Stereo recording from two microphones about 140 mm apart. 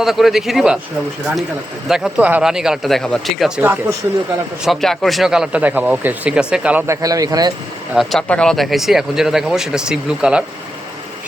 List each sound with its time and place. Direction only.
0.0 s speech: centre (ahead or behind)
1.9 s speech: 10° right (ahead or behind)
3.6 s speech: 15° right (ahead or behind)
4.6 s speech: centre (ahead or behind)
6.8 s a man's voice: 20° right (ahead or behind)
7.9 s speech: 5° left (ahead or behind)